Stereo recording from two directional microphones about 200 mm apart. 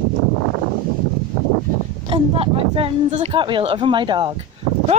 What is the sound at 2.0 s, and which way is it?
Speech, 25° right (ahead or behind).